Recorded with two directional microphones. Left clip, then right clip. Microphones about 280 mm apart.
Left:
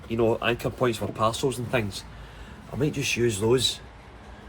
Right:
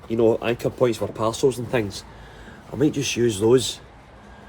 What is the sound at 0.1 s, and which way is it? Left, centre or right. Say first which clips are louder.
Speech: right 4 dB; right.